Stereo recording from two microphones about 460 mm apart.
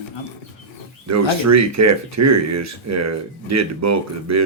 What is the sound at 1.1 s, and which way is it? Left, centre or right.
Speech, right.